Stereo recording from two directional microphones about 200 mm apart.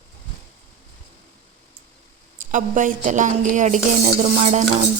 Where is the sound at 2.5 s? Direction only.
40° right (ahead or behind).